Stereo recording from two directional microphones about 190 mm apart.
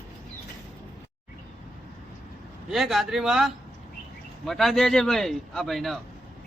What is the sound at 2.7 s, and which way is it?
Speech, centre (ahead or behind).